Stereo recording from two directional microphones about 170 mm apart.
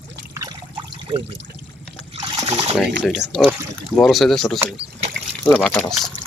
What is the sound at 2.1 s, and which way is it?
Trickle, 35° right (ahead or behind).